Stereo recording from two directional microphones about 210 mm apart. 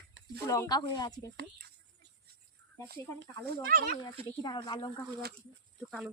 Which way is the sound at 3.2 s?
50° right (ahead or behind).